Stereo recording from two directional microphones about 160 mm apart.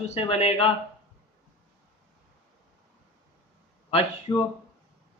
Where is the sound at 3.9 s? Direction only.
35° left (ahead or behind).